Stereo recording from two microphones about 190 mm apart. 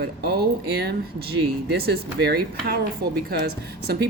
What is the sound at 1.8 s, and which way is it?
A woman's voice, 55° right (ahead or behind).